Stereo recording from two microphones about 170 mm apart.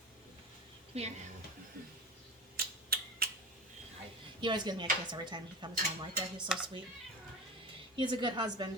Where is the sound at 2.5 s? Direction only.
60° right (ahead or behind).